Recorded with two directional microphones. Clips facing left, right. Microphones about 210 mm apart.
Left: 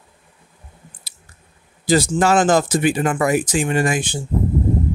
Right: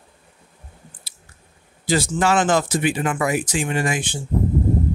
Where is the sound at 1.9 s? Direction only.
40° left (ahead or behind).